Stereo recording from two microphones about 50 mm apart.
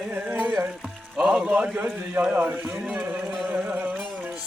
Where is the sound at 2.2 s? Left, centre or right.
Right.